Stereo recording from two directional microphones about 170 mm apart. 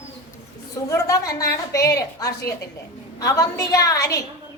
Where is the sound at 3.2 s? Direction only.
20° left (ahead or behind).